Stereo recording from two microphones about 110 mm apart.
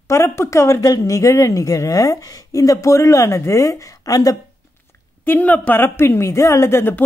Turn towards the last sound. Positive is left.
turn(degrees=20)  # may be behind; listen again after turning